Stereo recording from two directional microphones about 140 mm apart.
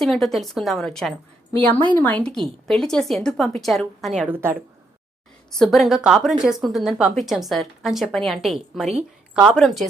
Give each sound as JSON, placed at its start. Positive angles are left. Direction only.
{"t": 0.0, "sound": "a woman's voice", "side_deg": 0}
{"t": 4.3, "sound": "a woman's voice", "side_deg": -20}
{"t": 5.5, "sound": "a woman's voice", "side_deg": 5}